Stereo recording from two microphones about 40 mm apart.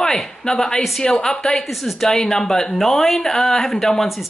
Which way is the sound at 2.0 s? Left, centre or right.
Centre.